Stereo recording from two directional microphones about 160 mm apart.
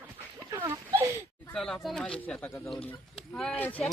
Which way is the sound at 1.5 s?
5° left (ahead or behind).